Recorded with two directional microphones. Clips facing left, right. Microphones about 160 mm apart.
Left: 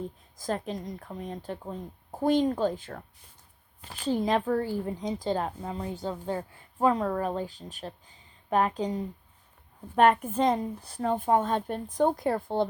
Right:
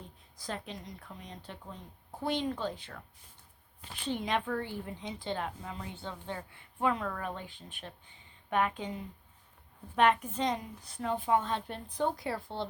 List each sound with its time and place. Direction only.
0.3 s speech: 45° left (ahead or behind)
10.8 s speech: 35° left (ahead or behind)